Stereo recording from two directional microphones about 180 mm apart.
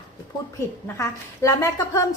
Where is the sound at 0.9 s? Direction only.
15° left (ahead or behind).